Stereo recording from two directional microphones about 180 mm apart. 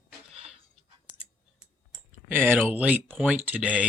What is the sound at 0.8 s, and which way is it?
Clicking, 30° right (ahead or behind).